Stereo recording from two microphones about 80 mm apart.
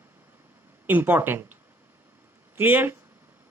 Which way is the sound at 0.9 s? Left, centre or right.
Right.